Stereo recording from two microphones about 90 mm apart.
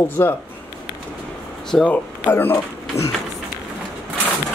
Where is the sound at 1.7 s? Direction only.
15° left (ahead or behind).